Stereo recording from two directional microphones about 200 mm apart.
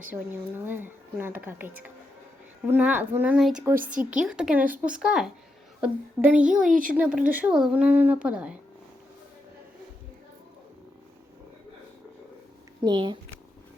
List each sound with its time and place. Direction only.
0.1 s speech: 10° right (ahead or behind)
3.8 s a woman's voice: 40° right (ahead or behind)
4.3 s a child's voice: 5° right (ahead or behind)
6.7 s a woman's voice: 40° right (ahead or behind)
6.9 s speech: 5° right (ahead or behind)
12.8 s speech: 20° right (ahead or behind)